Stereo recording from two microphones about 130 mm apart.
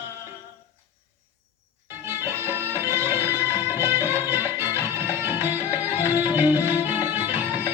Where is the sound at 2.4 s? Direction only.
20° right (ahead or behind).